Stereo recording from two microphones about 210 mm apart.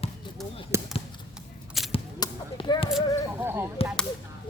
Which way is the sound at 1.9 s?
20° left (ahead or behind).